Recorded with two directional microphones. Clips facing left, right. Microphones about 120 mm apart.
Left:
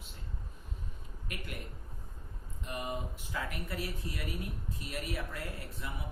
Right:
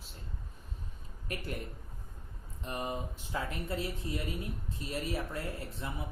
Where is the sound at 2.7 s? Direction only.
35° right (ahead or behind).